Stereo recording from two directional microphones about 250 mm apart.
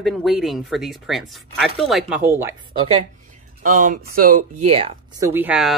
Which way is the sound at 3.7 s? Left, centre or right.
Right.